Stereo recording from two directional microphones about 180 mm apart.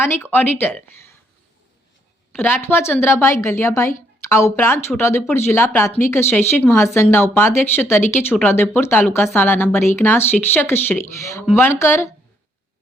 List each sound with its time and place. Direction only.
0.2 s a woman's voice: 10° left (ahead or behind)
2.4 s a woman's voice: 10° left (ahead or behind)